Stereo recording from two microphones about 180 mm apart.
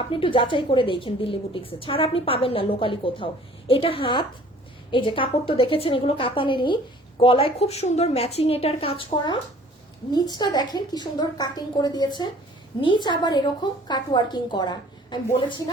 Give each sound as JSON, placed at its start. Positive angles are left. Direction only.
{"t": 0.1, "sound": "a woman's voice", "side_deg": 30}